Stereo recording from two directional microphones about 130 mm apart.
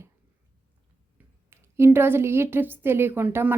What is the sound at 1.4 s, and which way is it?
A woman's voice, 20° right (ahead or behind).